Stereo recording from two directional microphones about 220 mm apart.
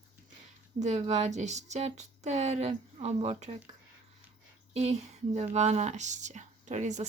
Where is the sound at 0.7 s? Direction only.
30° right (ahead or behind).